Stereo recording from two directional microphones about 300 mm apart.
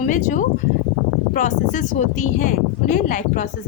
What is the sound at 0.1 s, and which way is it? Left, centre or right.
A woman's voice, left.